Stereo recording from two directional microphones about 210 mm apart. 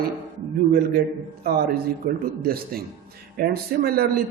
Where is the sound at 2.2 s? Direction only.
45° right (ahead or behind).